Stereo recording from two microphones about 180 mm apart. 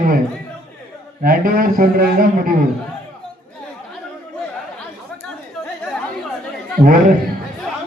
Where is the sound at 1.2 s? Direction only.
55° right (ahead or behind).